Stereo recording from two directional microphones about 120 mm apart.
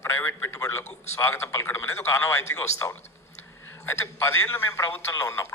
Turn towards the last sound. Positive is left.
turn(degrees=25)  # may be behind; listen again after turning